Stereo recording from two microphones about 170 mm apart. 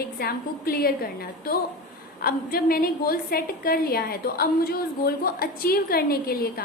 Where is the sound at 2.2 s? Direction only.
60° left (ahead or behind).